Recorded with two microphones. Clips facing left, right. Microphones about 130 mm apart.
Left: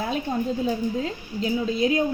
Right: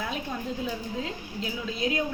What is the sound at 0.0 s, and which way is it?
A woman's voice, 35° left (ahead or behind).